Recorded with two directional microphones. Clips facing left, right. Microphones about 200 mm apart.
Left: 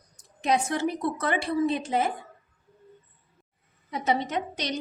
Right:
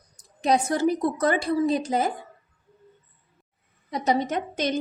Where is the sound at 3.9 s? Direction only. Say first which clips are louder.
Right 3 dB; 40° right (ahead or behind).